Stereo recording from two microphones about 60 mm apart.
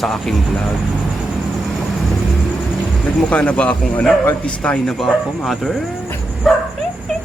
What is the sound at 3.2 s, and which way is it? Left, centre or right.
A man's voice, left.